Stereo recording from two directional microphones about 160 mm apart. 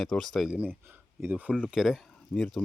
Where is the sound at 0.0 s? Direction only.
5° left (ahead or behind).